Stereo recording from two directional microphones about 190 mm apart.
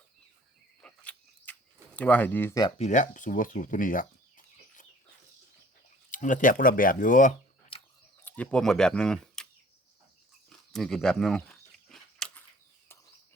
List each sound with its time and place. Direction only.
0.8 s cricket: 5° left (ahead or behind)
2.0 s speech: 10° left (ahead or behind)
2.7 s speech: 40° left (ahead or behind)
6.1 s speech: 45° left (ahead or behind)
8.2 s speech: 5° left (ahead or behind)
10.7 s a sound: centre (ahead or behind)